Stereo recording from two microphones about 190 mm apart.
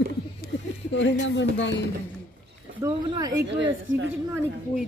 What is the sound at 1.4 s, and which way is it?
Speech, 70° left (ahead or behind).